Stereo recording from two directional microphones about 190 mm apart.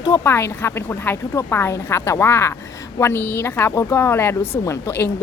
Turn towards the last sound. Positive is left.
turn(degrees=10)  # may be behind; listen again after turning